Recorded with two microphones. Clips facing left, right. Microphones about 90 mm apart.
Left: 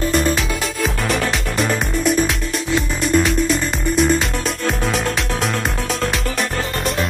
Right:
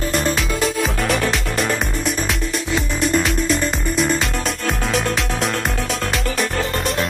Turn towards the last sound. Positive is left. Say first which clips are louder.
# even
turn(degrees=0)  # may be behind; listen again after turning